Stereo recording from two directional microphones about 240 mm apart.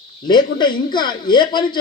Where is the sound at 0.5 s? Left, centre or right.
Centre.